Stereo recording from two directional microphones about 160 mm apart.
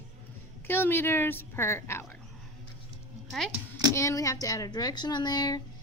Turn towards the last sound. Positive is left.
turn(degrees=25)  # may be behind; listen again after turning